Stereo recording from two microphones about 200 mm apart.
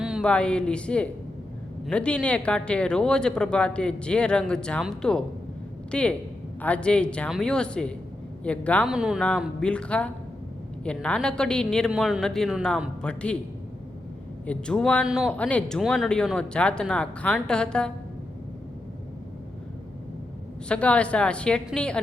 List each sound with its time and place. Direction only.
0.0 s speech: centre (ahead or behind)
14.4 s speech: 5° left (ahead or behind)
20.7 s speech: 5° left (ahead or behind)